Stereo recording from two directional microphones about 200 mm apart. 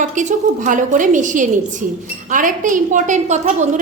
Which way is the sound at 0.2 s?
40° right (ahead or behind).